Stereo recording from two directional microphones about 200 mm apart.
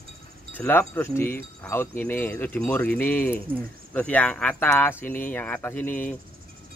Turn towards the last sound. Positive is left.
turn(degrees=10)  # may be behind; listen again after turning